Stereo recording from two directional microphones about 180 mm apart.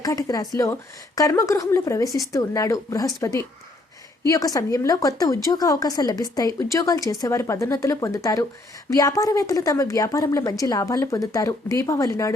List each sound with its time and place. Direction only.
0.0 s a woman's voice: 20° left (ahead or behind)